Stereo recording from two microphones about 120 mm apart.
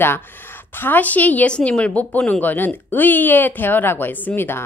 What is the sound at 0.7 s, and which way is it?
A woman's voice, 15° left (ahead or behind).